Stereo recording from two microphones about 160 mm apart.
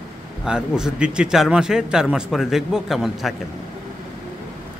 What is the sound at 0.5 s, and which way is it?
A man's voice, 5° right (ahead or behind).